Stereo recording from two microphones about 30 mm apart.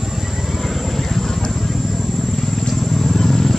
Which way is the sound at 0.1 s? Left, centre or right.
Centre.